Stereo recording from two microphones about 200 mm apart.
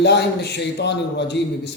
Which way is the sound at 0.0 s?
60° left (ahead or behind).